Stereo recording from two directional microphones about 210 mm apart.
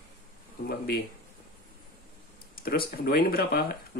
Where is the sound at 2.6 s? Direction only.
45° left (ahead or behind).